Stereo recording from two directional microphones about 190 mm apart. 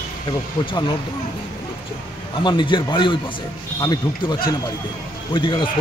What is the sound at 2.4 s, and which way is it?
Speech, 25° left (ahead or behind).